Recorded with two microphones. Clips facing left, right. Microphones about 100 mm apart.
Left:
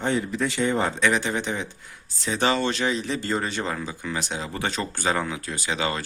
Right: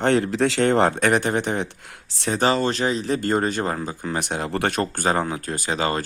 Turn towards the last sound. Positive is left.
turn(degrees=-40)  # may be behind; listen again after turning